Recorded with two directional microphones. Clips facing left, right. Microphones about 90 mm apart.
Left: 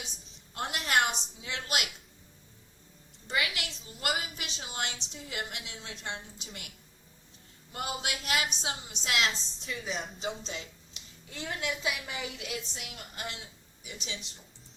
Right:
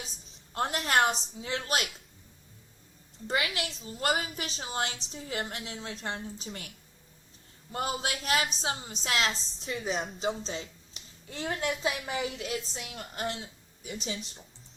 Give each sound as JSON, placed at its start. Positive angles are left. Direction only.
{"t": 0.5, "sound": "a woman's voice", "side_deg": -35}
{"t": 3.2, "sound": "a woman's voice", "side_deg": -40}
{"t": 9.9, "sound": "speech", "side_deg": 0}
{"t": 10.2, "sound": "speech", "side_deg": -35}